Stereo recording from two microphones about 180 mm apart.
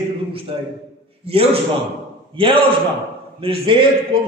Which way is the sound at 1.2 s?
35° right (ahead or behind).